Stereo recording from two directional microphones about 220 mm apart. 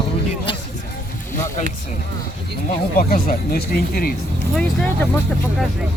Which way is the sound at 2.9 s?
40° left (ahead or behind).